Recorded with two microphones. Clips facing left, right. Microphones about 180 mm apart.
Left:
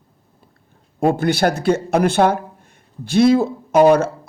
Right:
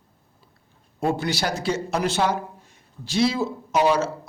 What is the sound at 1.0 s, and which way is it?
A man's voice, 55° left (ahead or behind).